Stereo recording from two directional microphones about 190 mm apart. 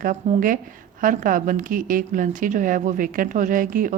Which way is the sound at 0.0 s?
45° right (ahead or behind).